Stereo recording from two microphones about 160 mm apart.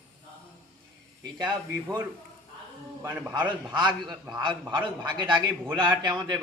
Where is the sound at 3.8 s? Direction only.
25° right (ahead or behind).